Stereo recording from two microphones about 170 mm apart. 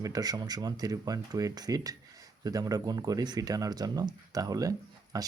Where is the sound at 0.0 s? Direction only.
20° right (ahead or behind).